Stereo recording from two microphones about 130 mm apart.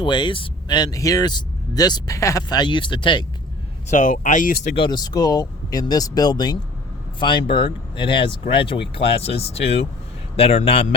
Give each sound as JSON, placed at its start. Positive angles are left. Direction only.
{"t": 0.0, "sound": "speech", "side_deg": 40}
{"t": 3.8, "sound": "speech", "side_deg": 80}
{"t": 4.7, "sound": "speech", "side_deg": 35}